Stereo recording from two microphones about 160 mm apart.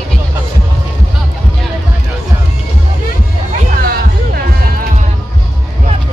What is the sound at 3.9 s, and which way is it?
Music, 70° right (ahead or behind).